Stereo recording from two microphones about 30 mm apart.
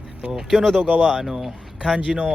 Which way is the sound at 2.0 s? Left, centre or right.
Right.